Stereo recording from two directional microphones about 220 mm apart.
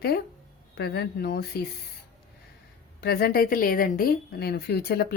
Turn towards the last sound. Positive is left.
turn(degrees=45)  # may be behind; listen again after turning